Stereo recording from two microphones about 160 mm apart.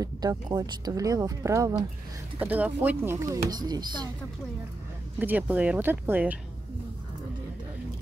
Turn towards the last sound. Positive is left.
turn(degrees=-10)  # may be behind; listen again after turning